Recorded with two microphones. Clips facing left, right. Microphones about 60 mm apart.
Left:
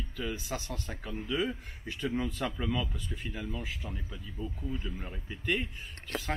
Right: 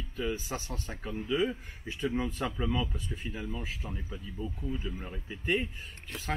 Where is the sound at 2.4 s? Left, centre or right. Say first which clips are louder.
Right 1 dB; centre.